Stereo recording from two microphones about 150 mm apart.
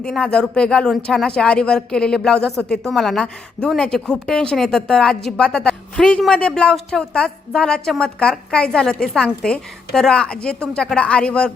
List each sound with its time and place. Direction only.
0.0 s speech: 5° left (ahead or behind)